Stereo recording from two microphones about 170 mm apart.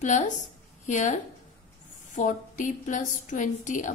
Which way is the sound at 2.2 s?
50° left (ahead or behind).